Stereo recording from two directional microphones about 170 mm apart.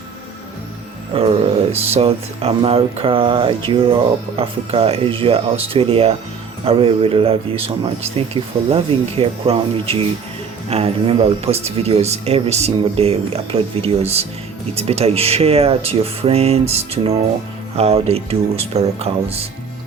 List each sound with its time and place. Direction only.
1.1 s speech: 35° right (ahead or behind)